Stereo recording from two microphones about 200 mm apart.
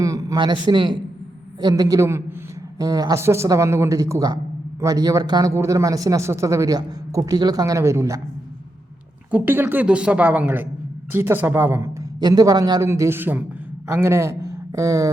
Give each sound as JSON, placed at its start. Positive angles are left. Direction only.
{"t": 0.0, "sound": "a man's voice", "side_deg": -15}
{"t": 9.3, "sound": "speech", "side_deg": -10}